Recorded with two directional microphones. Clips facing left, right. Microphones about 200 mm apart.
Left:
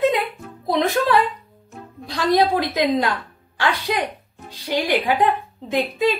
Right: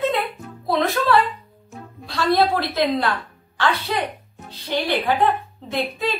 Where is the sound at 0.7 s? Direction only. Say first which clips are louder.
Left 1 dB; 15° left (ahead or behind).